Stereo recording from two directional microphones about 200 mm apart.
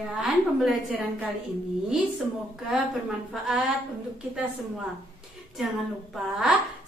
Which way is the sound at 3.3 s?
Centre (ahead or behind).